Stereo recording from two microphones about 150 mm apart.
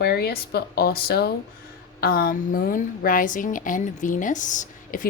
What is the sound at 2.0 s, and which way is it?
A woman's voice, 75° left (ahead or behind).